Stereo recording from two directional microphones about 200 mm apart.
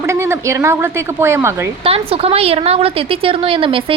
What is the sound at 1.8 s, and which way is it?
A woman's voice, 30° right (ahead or behind).